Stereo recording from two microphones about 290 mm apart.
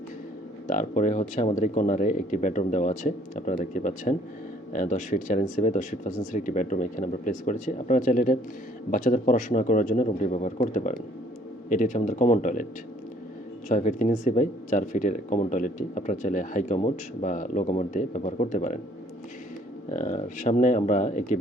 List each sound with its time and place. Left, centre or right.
0.7 s speech: left
13.7 s speech: left
19.9 s speech: left